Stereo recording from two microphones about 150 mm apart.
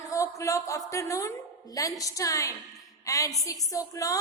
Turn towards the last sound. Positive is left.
turn(degrees=20)  # may be behind; listen again after turning